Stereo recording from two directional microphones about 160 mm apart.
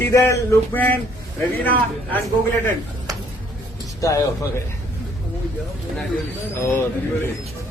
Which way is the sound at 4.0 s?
20° left (ahead or behind).